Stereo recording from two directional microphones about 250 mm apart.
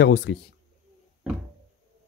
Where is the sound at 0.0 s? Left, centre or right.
Left.